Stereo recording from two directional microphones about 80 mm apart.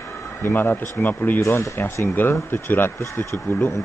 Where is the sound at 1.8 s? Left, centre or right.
Left.